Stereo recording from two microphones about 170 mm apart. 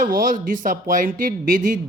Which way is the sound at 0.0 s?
55° right (ahead or behind).